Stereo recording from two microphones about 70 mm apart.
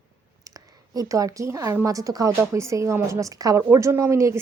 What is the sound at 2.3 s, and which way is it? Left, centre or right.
Speech, right.